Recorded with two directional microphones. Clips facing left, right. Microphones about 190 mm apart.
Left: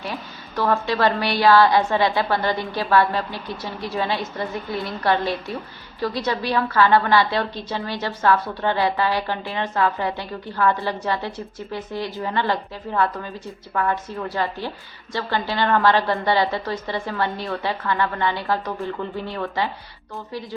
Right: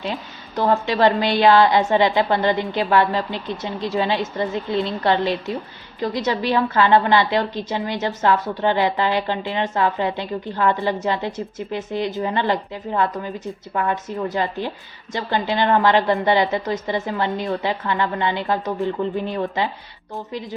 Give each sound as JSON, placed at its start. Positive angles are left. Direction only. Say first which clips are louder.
{"t": 0.0, "sound": "a woman's voice", "louder": "right 3 dB", "side_deg": -20}